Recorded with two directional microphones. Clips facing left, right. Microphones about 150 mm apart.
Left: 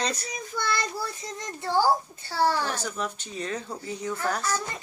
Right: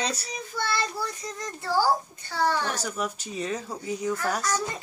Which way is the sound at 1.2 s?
25° left (ahead or behind).